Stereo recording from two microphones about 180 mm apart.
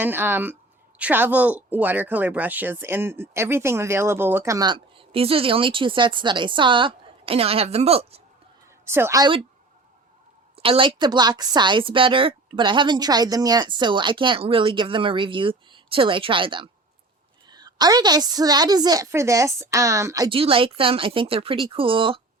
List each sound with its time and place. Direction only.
0.0 s speech: 10° right (ahead or behind); by 8.2 s 35° right (ahead or behind)
8.8 s a woman's voice: 15° right (ahead or behind)
10.5 s speech: 30° right (ahead or behind)
20.3 s speech: 30° right (ahead or behind)